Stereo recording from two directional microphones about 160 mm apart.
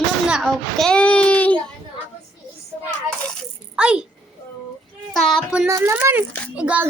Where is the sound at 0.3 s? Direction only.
Centre (ahead or behind).